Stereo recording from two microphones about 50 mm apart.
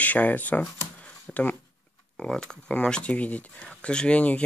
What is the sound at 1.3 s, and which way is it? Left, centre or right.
Speech, centre.